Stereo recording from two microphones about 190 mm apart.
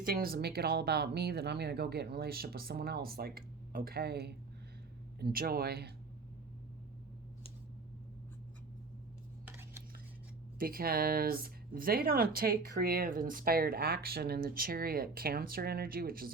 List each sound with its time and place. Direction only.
0.0 s speech: 50° right (ahead or behind)
10.6 s speech: 50° right (ahead or behind)